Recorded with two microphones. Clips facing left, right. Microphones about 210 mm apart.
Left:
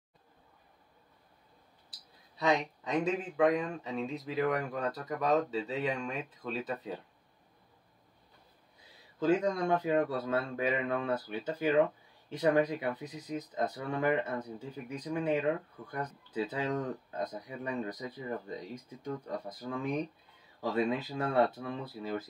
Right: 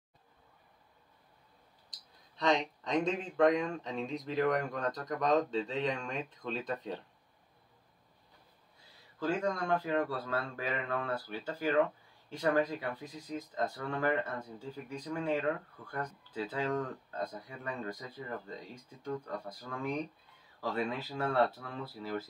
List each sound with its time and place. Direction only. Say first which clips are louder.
1.9 s speech: left 1 dB; 10° left (ahead or behind)
9.2 s speech: left 5 dB; 20° left (ahead or behind)